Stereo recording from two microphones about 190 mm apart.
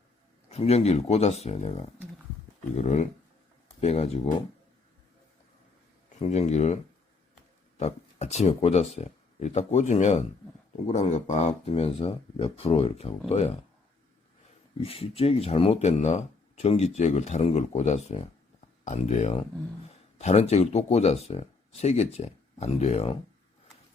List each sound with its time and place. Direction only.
0.5 s speech: 35° left (ahead or behind)
6.1 s speech: 35° left (ahead or behind)
7.8 s speech: 35° left (ahead or behind)
14.8 s speech: 30° left (ahead or behind)